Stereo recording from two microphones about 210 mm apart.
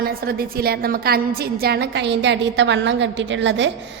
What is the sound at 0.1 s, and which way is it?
A woman's voice, 45° right (ahead or behind).